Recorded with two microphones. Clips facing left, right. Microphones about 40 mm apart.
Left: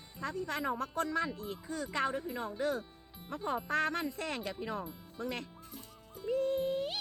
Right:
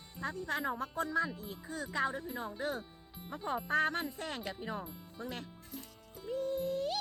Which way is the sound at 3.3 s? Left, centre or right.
Left.